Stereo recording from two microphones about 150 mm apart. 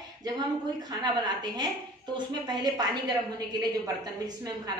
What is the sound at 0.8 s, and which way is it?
A woman's voice, 25° right (ahead or behind).